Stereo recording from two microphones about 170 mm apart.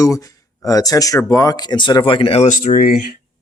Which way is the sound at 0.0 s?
20° left (ahead or behind).